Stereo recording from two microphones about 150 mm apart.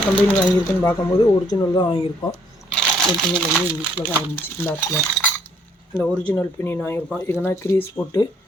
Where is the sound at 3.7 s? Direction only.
10° right (ahead or behind).